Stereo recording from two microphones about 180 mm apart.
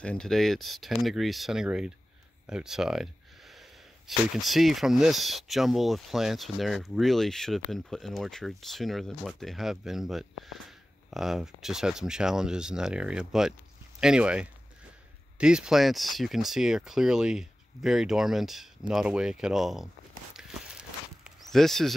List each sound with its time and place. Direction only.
0.0 s speech: 5° left (ahead or behind)
2.4 s a sound: 5° right (ahead or behind)
4.4 s speech: centre (ahead or behind)
20.3 s walk: 5° right (ahead or behind)